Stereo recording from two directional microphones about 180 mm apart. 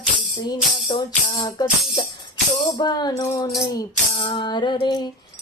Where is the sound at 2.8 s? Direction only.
25° left (ahead or behind).